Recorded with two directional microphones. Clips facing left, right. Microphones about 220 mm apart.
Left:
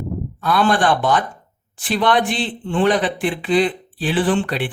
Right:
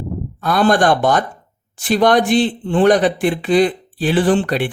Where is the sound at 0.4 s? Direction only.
45° right (ahead or behind).